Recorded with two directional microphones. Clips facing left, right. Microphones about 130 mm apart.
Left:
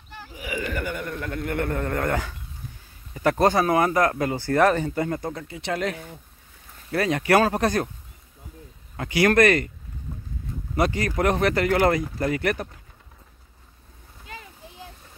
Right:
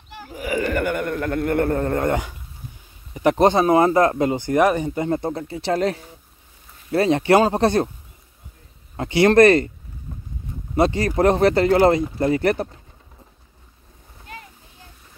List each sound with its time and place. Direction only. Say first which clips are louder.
0.3 s a sound: right 7 dB; 50° right (ahead or behind)
0.7 s a man's voice: right 7 dB; 60° right (ahead or behind); by 7.9 s 25° right (ahead or behind)
8.9 s speech: right 5 dB; 25° right (ahead or behind)
10.7 s speech: right 5 dB; 25° right (ahead or behind)